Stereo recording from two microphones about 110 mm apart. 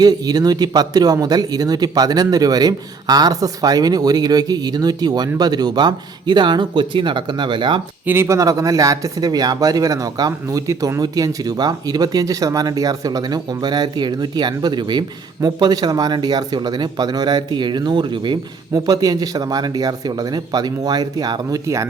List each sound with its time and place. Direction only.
0.0 s speech: 35° right (ahead or behind)
8.0 s speech: 20° right (ahead or behind); by 21.6 s 40° right (ahead or behind)